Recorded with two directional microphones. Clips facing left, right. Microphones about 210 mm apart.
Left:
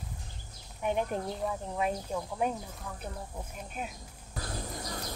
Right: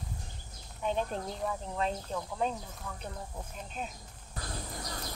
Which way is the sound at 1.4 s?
Centre (ahead or behind).